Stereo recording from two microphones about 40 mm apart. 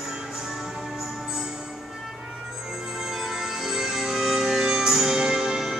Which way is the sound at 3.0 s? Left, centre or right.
Centre.